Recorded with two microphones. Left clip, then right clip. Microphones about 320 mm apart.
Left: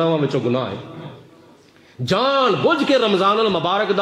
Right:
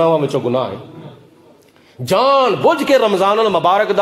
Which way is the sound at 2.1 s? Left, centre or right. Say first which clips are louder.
Right 5 dB; right.